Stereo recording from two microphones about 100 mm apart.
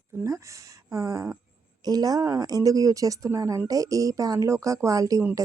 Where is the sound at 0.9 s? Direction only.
30° right (ahead or behind).